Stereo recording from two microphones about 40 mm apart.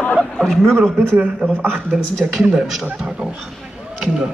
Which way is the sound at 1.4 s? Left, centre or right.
Centre.